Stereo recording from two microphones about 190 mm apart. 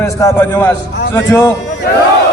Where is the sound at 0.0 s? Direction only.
15° left (ahead or behind).